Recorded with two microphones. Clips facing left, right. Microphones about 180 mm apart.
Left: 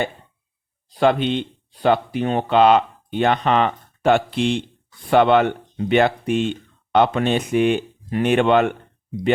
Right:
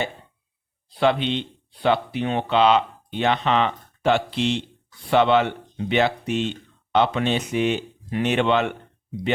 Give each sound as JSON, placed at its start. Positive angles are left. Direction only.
{"t": 0.9, "sound": "speech", "side_deg": 50}